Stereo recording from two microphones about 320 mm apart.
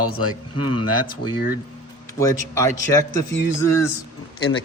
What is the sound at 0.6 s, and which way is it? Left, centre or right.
Speech, centre.